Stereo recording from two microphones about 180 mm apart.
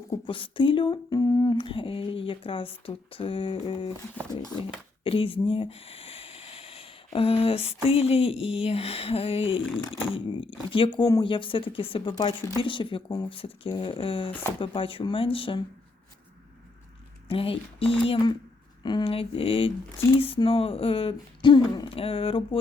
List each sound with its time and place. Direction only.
0.1 s speech: 30° left (ahead or behind)
10.7 s speech: 30° left (ahead or behind)
17.2 s speech: 30° left (ahead or behind)